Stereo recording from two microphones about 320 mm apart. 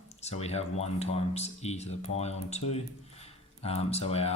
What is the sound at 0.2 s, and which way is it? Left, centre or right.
Speech, centre.